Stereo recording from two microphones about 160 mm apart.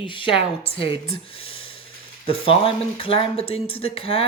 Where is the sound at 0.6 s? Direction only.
35° left (ahead or behind).